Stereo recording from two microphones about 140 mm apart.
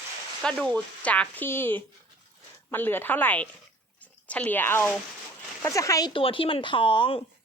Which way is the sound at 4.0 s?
10° left (ahead or behind).